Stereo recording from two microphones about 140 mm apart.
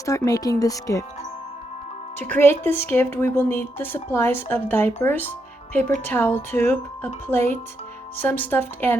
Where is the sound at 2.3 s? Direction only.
15° left (ahead or behind).